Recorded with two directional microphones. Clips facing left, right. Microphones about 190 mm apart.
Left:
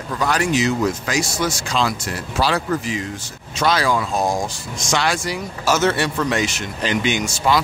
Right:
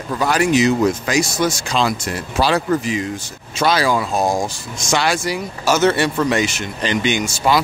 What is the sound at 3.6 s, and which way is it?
Speech, 5° right (ahead or behind).